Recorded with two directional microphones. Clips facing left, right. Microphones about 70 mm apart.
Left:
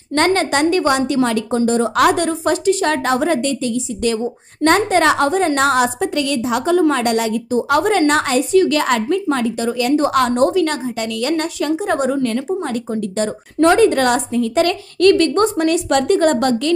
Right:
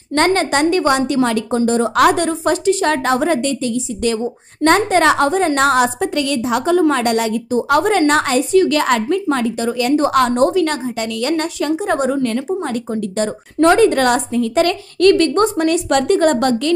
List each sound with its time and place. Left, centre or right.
0.1 s a woman's voice: right